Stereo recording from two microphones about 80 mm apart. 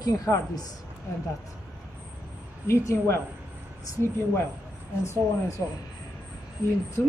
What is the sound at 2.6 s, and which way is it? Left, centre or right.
Speech, left.